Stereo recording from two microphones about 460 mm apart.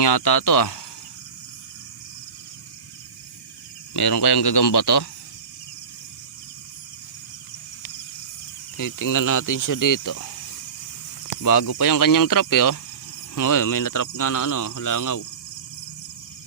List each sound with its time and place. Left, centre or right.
0.0 s speech: left
3.9 s speech: left
8.8 s speech: left
11.4 s speech: left